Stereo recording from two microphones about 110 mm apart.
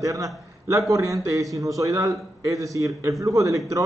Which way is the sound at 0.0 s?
30° right (ahead or behind).